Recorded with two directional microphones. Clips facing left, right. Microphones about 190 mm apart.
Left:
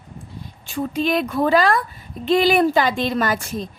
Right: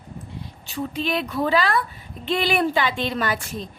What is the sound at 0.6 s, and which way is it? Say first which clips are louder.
A woman's voice: left 5 dB; 45° left (ahead or behind).